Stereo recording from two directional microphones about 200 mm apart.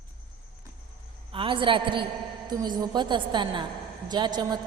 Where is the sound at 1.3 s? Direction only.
25° right (ahead or behind).